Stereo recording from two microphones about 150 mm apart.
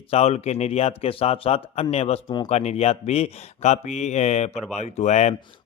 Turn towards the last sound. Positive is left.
turn(degrees=50)  # may be behind; listen again after turning